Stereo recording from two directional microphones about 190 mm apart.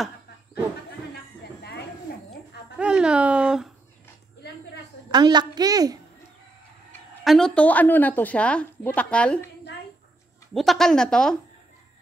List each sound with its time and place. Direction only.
1.4 s a sound: 60° left (ahead or behind)
2.3 s speech: 5° right (ahead or behind)
5.1 s a woman's voice: 20° right (ahead or behind)
7.2 s a woman's voice: 5° left (ahead or behind)
10.5 s speech: centre (ahead or behind)